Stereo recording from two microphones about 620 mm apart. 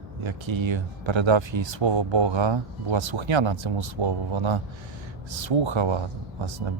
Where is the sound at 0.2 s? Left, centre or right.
Right.